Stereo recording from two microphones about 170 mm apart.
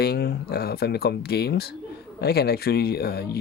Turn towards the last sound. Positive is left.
turn(degrees=65)  # may be behind; listen again after turning